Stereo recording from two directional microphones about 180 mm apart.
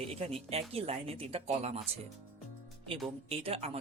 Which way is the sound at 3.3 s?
35° right (ahead or behind).